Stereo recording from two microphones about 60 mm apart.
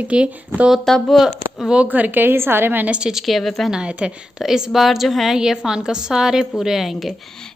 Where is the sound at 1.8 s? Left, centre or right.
Right.